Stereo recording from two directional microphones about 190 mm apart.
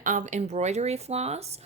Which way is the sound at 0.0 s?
45° right (ahead or behind).